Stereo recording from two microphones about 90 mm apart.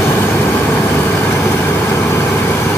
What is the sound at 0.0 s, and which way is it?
Vehicle, 20° left (ahead or behind).